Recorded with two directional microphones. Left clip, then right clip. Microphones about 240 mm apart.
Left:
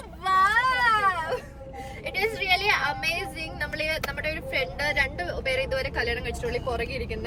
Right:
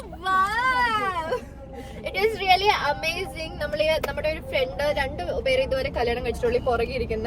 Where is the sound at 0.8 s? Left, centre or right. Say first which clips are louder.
Left 2 dB; centre.